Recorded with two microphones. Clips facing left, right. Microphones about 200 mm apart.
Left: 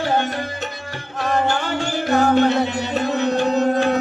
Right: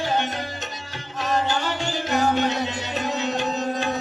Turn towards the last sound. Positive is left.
turn(degrees=55)  # may be behind; listen again after turning